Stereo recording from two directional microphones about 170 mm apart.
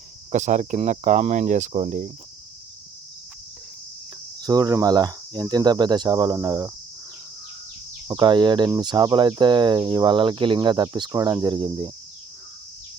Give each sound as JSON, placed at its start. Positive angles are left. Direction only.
{"t": 0.3, "sound": "speech", "side_deg": -45}
{"t": 4.4, "sound": "cricket", "side_deg": -25}
{"t": 8.0, "sound": "cricket", "side_deg": -25}